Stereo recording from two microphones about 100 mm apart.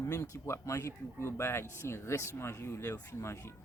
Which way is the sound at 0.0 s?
30° left (ahead or behind).